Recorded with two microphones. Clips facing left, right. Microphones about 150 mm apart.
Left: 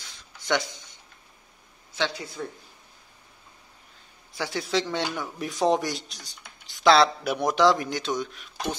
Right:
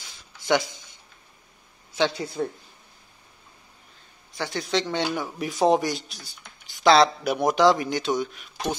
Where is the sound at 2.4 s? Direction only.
35° right (ahead or behind).